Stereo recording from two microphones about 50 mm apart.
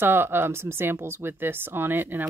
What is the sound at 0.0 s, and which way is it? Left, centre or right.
Speech, right.